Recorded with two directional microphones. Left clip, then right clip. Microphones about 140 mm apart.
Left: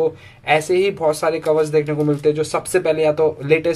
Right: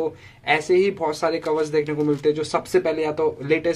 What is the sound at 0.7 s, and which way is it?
Speech, 25° right (ahead or behind).